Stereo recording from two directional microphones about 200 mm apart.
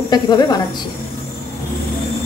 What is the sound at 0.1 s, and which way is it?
Speech, 20° left (ahead or behind).